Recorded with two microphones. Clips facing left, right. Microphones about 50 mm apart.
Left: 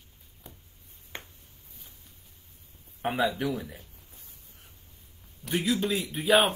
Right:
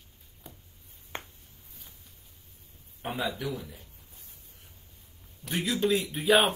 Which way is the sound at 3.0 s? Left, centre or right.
Left.